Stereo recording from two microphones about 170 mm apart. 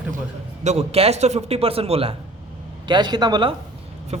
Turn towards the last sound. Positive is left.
turn(degrees=-40)  # may be behind; listen again after turning